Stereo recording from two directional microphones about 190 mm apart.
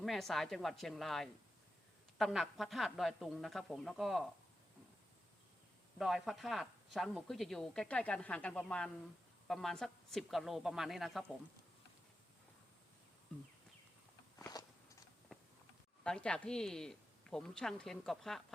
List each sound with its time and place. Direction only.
0.0 s speech: centre (ahead or behind)
6.0 s speech: centre (ahead or behind)
14.3 s walk: 15° left (ahead or behind)
16.0 s speech: 5° left (ahead or behind)